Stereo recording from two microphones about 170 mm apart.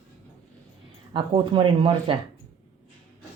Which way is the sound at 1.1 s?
30° right (ahead or behind).